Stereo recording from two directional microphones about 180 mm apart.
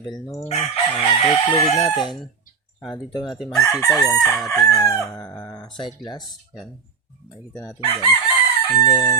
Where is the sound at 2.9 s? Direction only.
25° left (ahead or behind).